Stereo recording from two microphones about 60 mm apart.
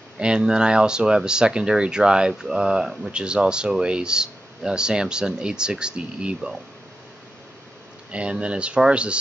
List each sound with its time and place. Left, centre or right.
0.2 s speech: centre
8.1 s speech: centre